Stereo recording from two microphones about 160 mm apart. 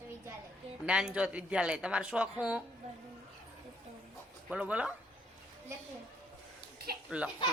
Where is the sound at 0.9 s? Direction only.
5° right (ahead or behind).